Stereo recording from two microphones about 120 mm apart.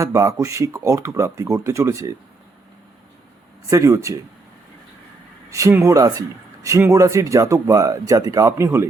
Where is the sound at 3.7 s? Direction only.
25° right (ahead or behind).